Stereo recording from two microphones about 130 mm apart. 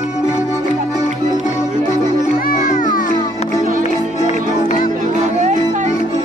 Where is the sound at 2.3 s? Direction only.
90° left.